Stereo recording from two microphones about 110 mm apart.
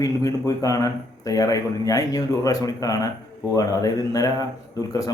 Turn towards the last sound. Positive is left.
turn(degrees=35)  # may be behind; listen again after turning